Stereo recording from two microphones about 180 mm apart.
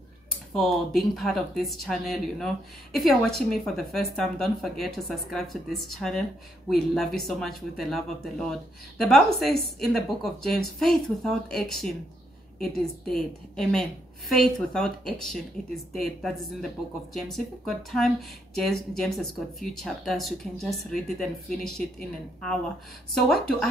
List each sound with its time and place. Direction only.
0.5 s speech: centre (ahead or behind)
23.1 s speech: centre (ahead or behind)